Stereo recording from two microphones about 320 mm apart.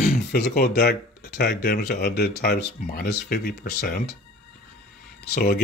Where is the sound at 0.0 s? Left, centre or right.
Left.